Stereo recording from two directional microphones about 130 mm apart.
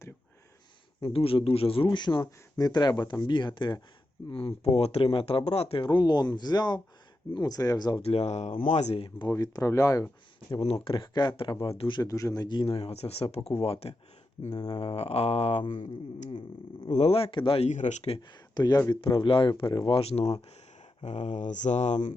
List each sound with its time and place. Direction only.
1.0 s speech: 45° left (ahead or behind); by 8.0 s 30° left (ahead or behind)
8.0 s speech: 55° left (ahead or behind); by 9.3 s 40° left (ahead or behind)
9.3 s speech: 25° left (ahead or behind)
10.5 s speech: 45° left (ahead or behind)
14.5 s speech: 30° left (ahead or behind)
14.9 s speech: 50° left (ahead or behind)
16.9 s speech: 50° left (ahead or behind)
17.7 s speech: 65° left (ahead or behind)
18.2 s speech: 35° left (ahead or behind); by 22.1 s 65° left (ahead or behind)